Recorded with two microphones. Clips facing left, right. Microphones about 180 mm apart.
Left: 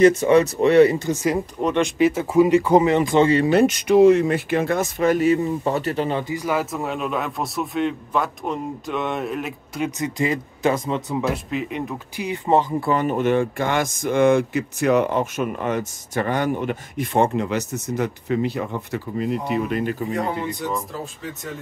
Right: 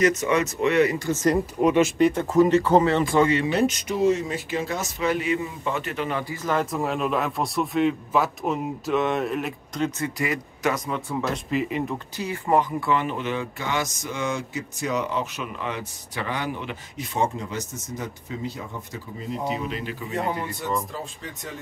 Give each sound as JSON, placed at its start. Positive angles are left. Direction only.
{"t": 0.0, "sound": "speech", "side_deg": 30}
{"t": 1.6, "sound": "speech", "side_deg": -10}
{"t": 2.0, "sound": "speech", "side_deg": 5}
{"t": 3.3, "sound": "speech", "side_deg": 35}
{"t": 3.5, "sound": "speech", "side_deg": 65}
{"t": 6.3, "sound": "a man's voice", "side_deg": 10}
{"t": 9.8, "sound": "speech", "side_deg": 15}
{"t": 11.5, "sound": "a man's voice", "side_deg": 0}
{"t": 12.2, "sound": "speech", "side_deg": 20}
{"t": 12.9, "sound": "speech", "side_deg": 45}